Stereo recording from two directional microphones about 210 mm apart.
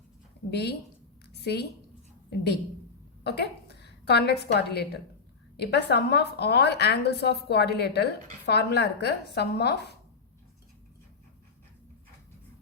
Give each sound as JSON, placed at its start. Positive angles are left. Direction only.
{"t": 0.5, "sound": "a woman's voice", "side_deg": 50}
{"t": 1.3, "sound": "a sound", "side_deg": 50}
{"t": 3.2, "sound": "a woman's voice", "side_deg": 50}